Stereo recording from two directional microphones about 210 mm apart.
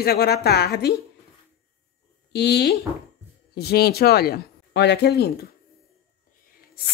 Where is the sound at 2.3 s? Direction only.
50° left (ahead or behind).